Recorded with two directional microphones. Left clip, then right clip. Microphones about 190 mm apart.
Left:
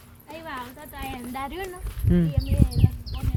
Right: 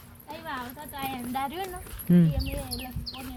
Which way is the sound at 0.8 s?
10° right (ahead or behind).